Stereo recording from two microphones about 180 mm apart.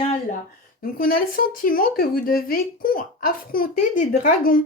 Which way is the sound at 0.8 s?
50° left (ahead or behind).